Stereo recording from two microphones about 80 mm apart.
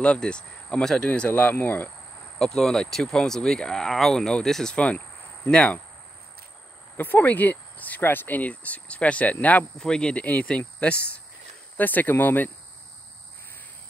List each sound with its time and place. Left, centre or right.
0.0 s speech: centre
2.3 s speech: centre
7.0 s speech: left
11.7 s speech: left